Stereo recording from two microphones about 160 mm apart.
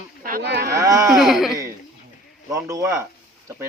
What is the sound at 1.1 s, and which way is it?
Speech, centre (ahead or behind).